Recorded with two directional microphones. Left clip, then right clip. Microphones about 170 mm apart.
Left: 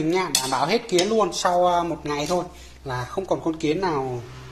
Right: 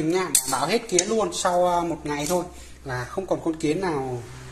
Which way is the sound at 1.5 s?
10° left (ahead or behind).